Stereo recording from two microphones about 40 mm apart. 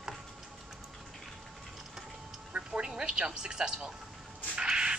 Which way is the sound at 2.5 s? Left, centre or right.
Right.